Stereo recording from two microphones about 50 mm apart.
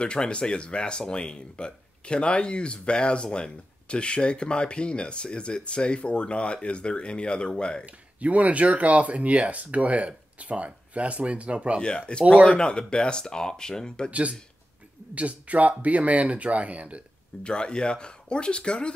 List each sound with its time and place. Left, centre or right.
0.0 s speech: left
7.8 s speech: right
11.8 s speech: centre
15.1 s speech: right
17.4 s speech: centre